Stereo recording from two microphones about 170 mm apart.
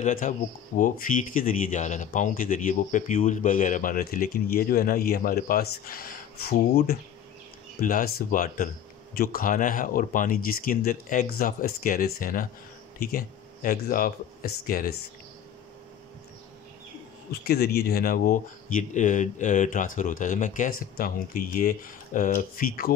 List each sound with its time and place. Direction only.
0.0 s speech: 50° left (ahead or behind); by 7.0 s 65° left (ahead or behind)
7.8 s speech: 55° left (ahead or behind)
17.3 s speech: 65° left (ahead or behind)